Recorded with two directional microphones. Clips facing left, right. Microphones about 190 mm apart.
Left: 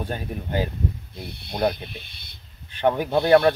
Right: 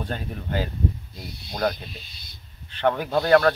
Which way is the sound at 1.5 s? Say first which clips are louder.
Left 2 dB; 25° left (ahead or behind).